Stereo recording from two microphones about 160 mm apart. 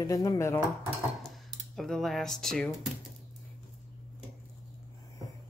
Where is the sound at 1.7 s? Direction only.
Centre (ahead or behind).